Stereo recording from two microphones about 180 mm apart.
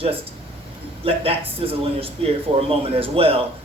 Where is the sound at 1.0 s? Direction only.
30° right (ahead or behind).